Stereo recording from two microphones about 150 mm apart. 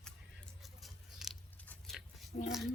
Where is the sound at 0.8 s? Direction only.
Centre (ahead or behind).